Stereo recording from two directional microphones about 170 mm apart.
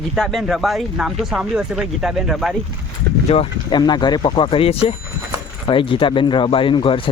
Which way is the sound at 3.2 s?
35° left (ahead or behind).